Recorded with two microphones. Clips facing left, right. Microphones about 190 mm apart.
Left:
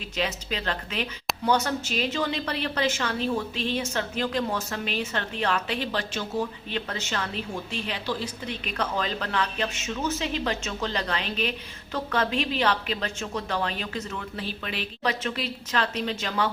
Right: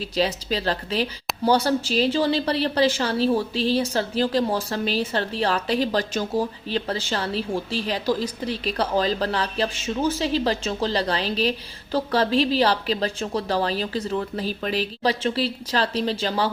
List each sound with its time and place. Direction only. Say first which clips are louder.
0.2 s a woman's voice: right 6 dB; 35° right (ahead or behind)